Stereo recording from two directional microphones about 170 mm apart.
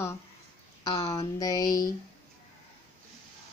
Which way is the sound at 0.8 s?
20° left (ahead or behind).